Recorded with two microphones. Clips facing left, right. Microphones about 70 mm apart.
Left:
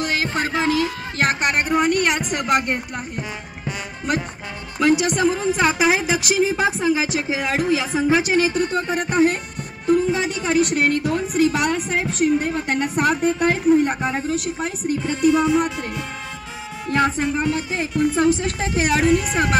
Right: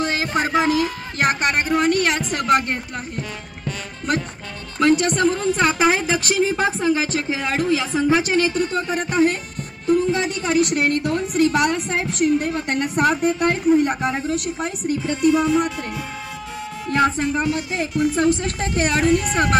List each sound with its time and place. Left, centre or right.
0.0 s music: right
0.8 s a woman's voice: centre
4.7 s a woman's voice: centre
16.9 s a woman's voice: centre